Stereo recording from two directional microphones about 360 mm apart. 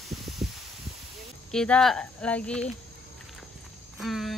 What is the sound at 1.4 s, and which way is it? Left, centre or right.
Speech, centre.